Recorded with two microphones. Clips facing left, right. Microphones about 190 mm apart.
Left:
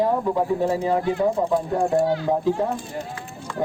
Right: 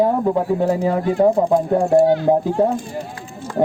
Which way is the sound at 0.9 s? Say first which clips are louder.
Right 5 dB; 45° right (ahead or behind).